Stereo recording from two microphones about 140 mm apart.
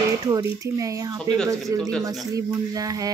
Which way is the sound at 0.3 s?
25° right (ahead or behind).